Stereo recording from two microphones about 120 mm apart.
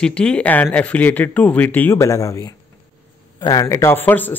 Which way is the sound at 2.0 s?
25° left (ahead or behind).